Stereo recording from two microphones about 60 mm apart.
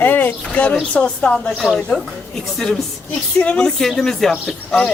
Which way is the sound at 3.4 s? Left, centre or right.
Centre.